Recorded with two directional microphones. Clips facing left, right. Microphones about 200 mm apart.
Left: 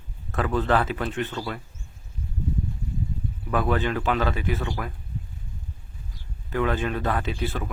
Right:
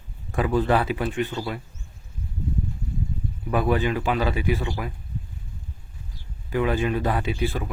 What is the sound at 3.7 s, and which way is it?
Speech, 10° right (ahead or behind).